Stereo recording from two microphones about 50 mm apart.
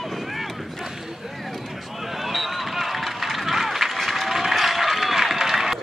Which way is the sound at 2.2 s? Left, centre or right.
Centre.